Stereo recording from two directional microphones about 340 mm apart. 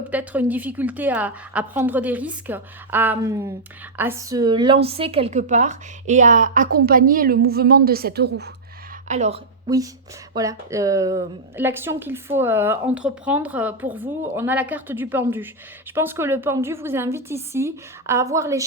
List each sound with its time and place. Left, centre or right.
0.1 s a woman's voice: centre